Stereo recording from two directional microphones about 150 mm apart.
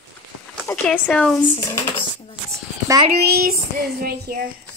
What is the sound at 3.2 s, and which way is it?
Child singing, 90° right.